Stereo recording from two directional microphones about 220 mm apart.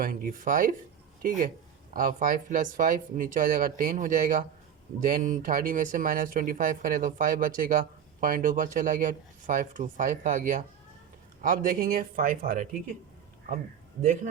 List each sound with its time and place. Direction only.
0.0 s speech: 40° right (ahead or behind)
1.9 s speech: 40° right (ahead or behind)